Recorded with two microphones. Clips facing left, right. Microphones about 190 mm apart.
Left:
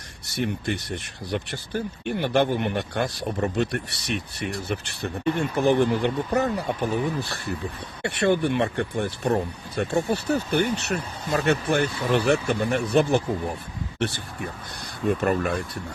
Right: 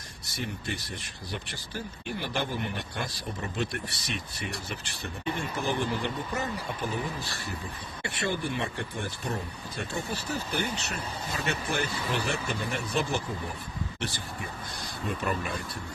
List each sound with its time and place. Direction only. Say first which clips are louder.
0.3 s speech: left 8 dB; 65° left (ahead or behind)
15.0 s speech: left 9 dB; 50° left (ahead or behind)